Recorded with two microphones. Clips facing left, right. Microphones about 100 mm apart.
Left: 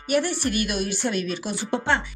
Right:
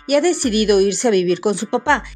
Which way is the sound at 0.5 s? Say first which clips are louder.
Right 12 dB; 70° right (ahead or behind).